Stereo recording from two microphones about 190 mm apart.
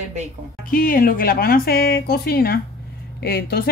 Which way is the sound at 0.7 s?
45° left (ahead or behind).